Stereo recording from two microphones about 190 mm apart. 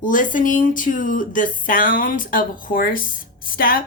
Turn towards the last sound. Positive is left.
turn(degrees=50)  # may be behind; listen again after turning